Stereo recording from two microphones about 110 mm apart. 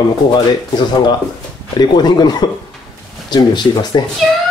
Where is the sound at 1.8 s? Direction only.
40° left (ahead or behind).